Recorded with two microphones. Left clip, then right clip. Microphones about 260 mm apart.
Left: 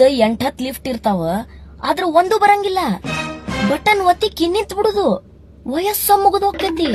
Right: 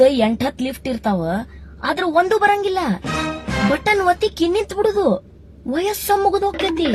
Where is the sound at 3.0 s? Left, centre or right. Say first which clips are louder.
Right 1 dB; centre.